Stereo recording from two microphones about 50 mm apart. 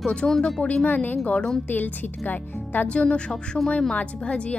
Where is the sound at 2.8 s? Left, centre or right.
Left.